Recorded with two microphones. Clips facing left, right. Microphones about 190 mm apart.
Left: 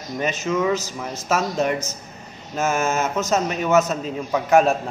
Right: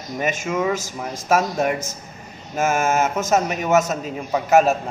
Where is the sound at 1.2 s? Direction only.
50° right (ahead or behind).